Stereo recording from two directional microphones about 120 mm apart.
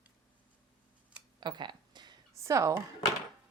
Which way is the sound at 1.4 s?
40° right (ahead or behind).